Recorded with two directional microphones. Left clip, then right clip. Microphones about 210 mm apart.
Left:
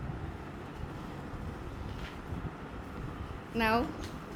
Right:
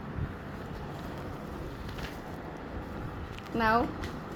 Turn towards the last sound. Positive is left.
turn(degrees=15)  # may be behind; listen again after turning